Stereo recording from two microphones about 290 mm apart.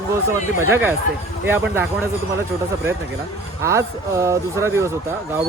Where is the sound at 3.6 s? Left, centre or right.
Centre.